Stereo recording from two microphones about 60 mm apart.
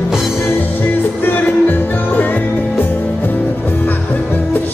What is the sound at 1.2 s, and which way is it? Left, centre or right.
Music, left.